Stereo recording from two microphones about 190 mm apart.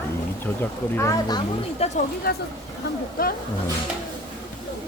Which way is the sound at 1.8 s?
35° left (ahead or behind).